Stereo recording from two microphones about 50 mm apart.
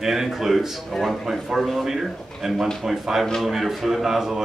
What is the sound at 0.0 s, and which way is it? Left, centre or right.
A man's voice, centre.